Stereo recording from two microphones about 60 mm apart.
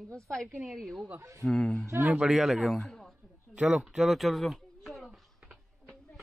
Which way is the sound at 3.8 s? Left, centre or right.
Centre.